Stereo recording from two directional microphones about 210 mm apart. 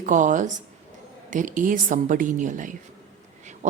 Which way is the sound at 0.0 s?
35° right (ahead or behind).